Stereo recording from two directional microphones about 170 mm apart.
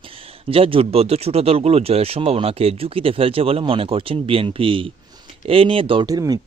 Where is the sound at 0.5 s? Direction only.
35° right (ahead or behind).